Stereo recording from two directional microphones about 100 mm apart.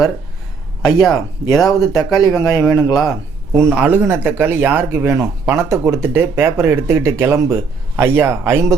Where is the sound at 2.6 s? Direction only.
5° right (ahead or behind).